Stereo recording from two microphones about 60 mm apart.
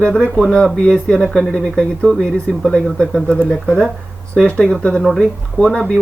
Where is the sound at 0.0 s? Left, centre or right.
Centre.